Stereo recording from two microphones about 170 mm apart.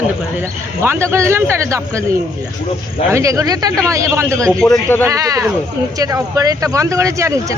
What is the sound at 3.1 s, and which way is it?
A man's voice, 20° right (ahead or behind).